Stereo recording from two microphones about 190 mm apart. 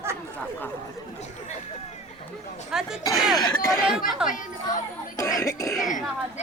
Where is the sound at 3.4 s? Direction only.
20° left (ahead or behind).